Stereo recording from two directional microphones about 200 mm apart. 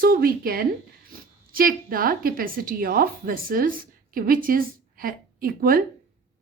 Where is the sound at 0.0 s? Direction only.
45° right (ahead or behind).